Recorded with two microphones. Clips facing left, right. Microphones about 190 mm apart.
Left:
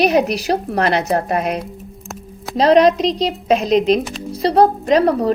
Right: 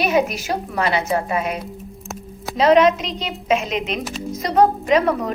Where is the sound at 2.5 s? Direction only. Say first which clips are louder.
Left 2 dB; 35° left (ahead or behind).